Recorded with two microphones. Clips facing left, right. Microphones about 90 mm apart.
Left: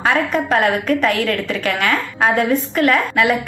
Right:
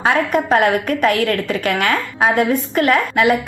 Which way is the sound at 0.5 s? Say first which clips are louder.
Even; 40° right (ahead or behind).